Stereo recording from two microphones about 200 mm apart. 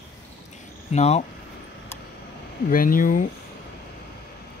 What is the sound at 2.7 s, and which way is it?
Speech, 45° left (ahead or behind).